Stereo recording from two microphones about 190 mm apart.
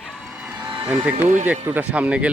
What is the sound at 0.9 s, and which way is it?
Speech, 15° right (ahead or behind).